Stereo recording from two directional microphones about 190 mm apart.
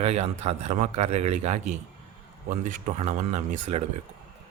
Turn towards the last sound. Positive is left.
turn(degrees=-35)  # may be behind; listen again after turning